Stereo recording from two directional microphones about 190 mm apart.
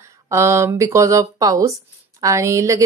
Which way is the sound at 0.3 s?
15° right (ahead or behind).